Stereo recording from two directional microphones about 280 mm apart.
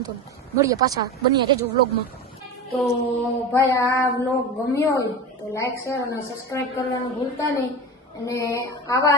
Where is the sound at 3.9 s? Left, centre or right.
Centre.